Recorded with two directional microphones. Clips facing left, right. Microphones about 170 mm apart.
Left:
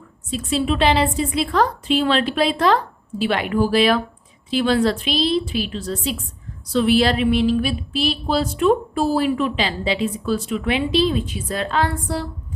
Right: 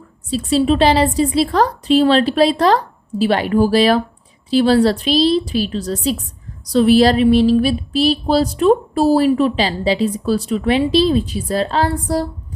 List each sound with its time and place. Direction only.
0.3 s speech: 35° right (ahead or behind)